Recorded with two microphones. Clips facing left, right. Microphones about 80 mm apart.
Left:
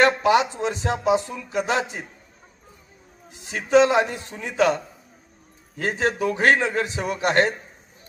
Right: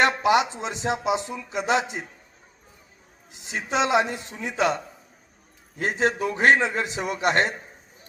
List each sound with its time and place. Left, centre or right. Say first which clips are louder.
0.0 s speech: left 2 dB; right
3.7 s speech: left 5 dB; centre
5.8 s speech: left 1 dB; right